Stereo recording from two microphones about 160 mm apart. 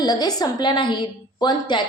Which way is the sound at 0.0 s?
25° left (ahead or behind).